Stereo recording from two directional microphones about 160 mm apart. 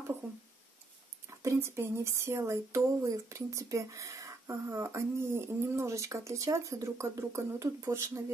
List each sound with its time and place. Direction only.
1.4 s speech: 15° right (ahead or behind)